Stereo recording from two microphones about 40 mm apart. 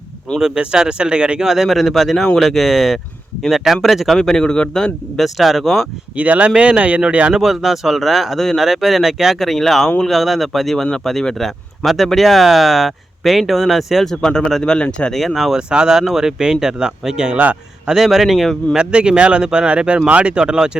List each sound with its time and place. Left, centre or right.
0.5 s speech: right
1.5 s speech: centre
4.2 s a man's voice: centre
5.1 s speech: centre
6.1 s speech: right
7.3 s speech: centre
14.2 s a man's voice: centre
15.1 s speech: centre
15.5 s speech: centre
17.8 s speech: centre
18.8 s speech: right
20.3 s speech: right